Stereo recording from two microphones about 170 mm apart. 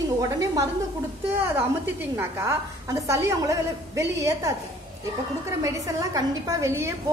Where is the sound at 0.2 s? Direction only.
20° right (ahead or behind).